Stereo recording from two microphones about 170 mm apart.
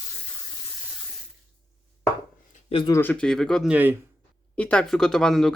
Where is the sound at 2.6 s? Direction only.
30° left (ahead or behind).